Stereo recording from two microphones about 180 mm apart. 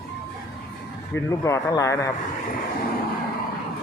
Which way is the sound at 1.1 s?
15° left (ahead or behind).